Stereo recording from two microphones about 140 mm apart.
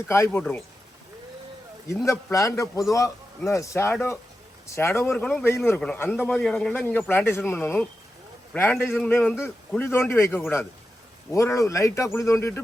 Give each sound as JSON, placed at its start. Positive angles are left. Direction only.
{"t": 0.1, "sound": "a man's voice", "side_deg": 15}
{"t": 2.0, "sound": "a man's voice", "side_deg": 20}